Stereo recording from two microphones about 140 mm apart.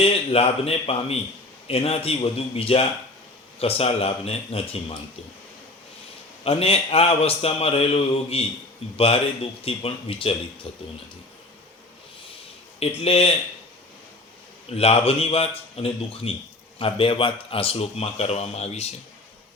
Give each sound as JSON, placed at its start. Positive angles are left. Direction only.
{"t": 0.0, "sound": "speech", "side_deg": 45}
{"t": 6.4, "sound": "speech", "side_deg": 45}
{"t": 13.1, "sound": "speech", "side_deg": 45}
{"t": 14.7, "sound": "speech", "side_deg": 45}